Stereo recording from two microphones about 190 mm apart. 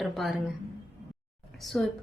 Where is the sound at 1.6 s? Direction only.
Centre (ahead or behind).